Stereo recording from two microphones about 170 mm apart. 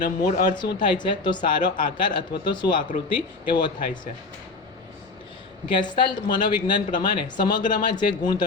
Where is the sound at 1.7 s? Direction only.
55° left (ahead or behind).